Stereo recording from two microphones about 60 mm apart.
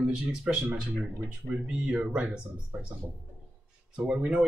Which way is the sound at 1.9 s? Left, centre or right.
Right.